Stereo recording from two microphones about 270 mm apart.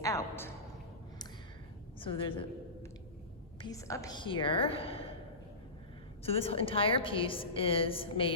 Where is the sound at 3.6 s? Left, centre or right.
Centre.